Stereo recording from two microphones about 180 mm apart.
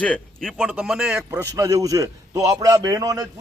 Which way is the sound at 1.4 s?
20° right (ahead or behind).